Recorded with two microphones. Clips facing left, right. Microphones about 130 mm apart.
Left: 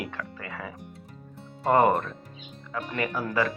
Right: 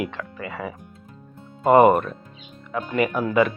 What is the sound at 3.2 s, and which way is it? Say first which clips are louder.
Speech: right 6 dB; 20° right (ahead or behind).